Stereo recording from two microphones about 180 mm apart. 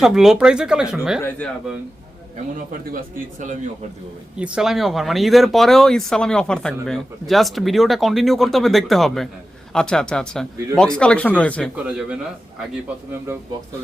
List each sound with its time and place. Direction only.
0.0 s speech: 5° right (ahead or behind)
1.4 s a man's voice: 5° left (ahead or behind)
4.4 s speech: 5° right (ahead or behind)
11.9 s speech: 5° right (ahead or behind)